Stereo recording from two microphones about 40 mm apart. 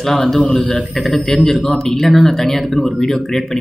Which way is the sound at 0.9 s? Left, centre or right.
Centre.